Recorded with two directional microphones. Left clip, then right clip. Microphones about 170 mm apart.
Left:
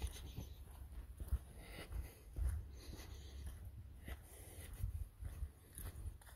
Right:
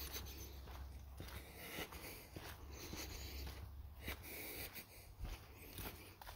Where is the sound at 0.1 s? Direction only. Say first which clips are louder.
Right 5 dB; 30° right (ahead or behind).